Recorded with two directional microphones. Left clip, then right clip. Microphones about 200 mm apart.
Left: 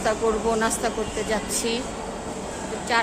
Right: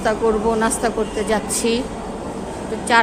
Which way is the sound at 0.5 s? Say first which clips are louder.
Right 5 dB; 10° right (ahead or behind).